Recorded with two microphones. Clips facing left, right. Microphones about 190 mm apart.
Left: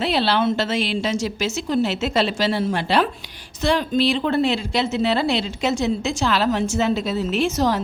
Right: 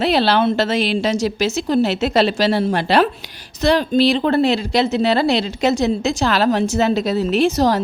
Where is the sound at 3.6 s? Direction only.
35° right (ahead or behind).